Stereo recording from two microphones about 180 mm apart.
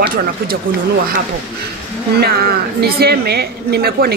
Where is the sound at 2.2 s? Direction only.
60° right (ahead or behind).